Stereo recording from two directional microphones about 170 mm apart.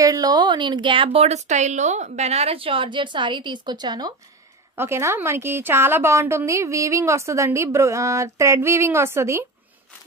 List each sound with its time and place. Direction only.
0.0 s a woman's voice: 20° right (ahead or behind)